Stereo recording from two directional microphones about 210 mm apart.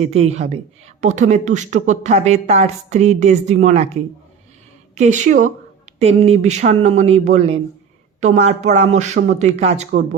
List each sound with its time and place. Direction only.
0.1 s speech: 30° right (ahead or behind)